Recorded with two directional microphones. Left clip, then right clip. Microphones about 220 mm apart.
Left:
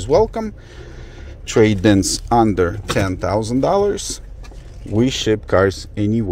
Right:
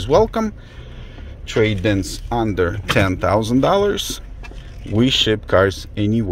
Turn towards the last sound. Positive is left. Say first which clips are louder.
# even
turn(degrees=5)  # may be behind; listen again after turning